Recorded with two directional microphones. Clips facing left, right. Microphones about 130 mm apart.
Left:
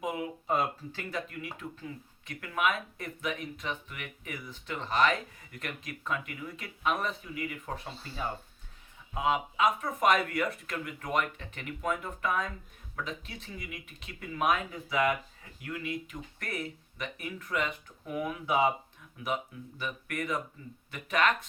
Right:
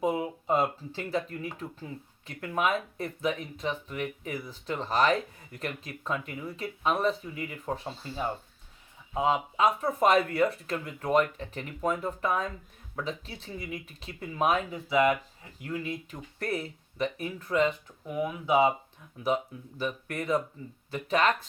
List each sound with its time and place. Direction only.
0.0 s speech: 30° right (ahead or behind)
15.6 s speech: 35° right (ahead or behind)
18.1 s speech: 20° right (ahead or behind)
19.2 s speech: 35° right (ahead or behind)